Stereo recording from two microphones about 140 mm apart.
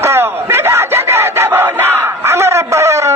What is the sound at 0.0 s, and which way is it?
Crowd, 20° right (ahead or behind).